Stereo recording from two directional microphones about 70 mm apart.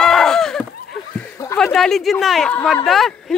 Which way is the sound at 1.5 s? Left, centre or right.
Centre.